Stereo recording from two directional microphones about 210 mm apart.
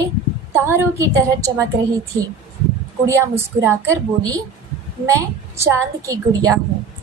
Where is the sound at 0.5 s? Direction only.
10° right (ahead or behind).